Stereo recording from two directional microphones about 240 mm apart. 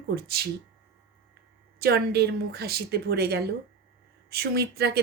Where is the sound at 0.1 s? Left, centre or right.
Right.